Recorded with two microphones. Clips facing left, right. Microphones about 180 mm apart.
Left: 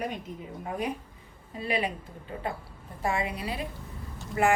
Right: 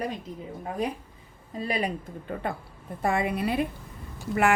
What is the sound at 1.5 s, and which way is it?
A woman's voice, 40° right (ahead or behind).